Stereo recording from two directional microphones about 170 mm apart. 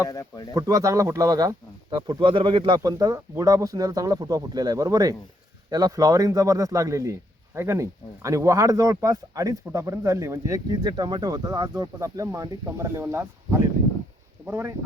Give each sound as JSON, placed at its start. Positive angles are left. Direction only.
{"t": 0.1, "sound": "speech", "side_deg": 20}
{"t": 0.5, "sound": "a man's voice", "side_deg": -20}